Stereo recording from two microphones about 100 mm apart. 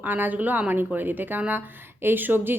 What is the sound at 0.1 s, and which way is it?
Speech, 20° right (ahead or behind).